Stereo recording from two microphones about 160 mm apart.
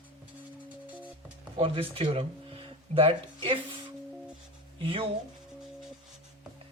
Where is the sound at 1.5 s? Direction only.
35° right (ahead or behind).